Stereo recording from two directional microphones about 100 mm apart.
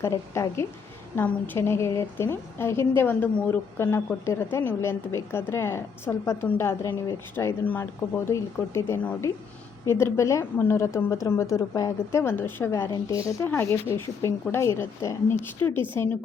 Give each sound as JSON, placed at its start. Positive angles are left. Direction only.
{"t": 0.0, "sound": "a woman's voice", "side_deg": 30}